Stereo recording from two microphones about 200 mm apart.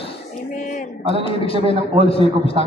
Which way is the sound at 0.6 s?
40° left (ahead or behind).